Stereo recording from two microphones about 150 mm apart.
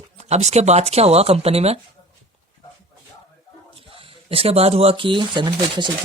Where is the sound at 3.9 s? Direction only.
40° right (ahead or behind).